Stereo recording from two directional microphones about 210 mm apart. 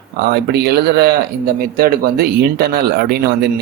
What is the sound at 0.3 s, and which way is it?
Speech, 50° right (ahead or behind).